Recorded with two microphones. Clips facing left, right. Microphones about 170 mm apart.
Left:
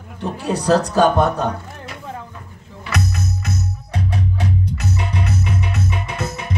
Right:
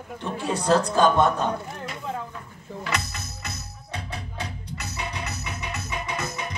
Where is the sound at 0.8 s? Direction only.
70° left (ahead or behind).